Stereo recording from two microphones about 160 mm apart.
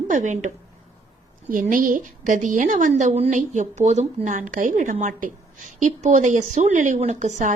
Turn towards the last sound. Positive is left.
turn(degrees=-50)  # may be behind; listen again after turning